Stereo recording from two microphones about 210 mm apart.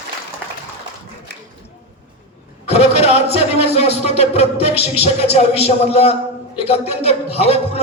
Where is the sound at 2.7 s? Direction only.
30° left (ahead or behind).